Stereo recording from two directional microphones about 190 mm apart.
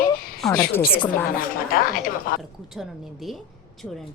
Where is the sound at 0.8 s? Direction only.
50° left (ahead or behind).